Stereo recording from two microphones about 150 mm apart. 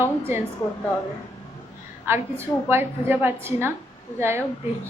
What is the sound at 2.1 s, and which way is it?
A woman's voice, 15° right (ahead or behind).